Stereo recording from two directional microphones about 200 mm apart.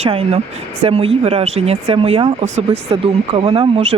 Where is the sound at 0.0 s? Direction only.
30° right (ahead or behind).